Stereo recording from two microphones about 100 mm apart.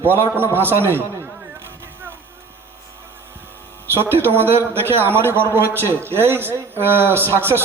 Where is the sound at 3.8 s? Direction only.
20° right (ahead or behind).